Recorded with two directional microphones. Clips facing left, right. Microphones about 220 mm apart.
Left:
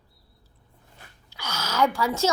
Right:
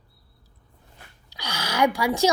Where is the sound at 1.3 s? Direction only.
15° right (ahead or behind).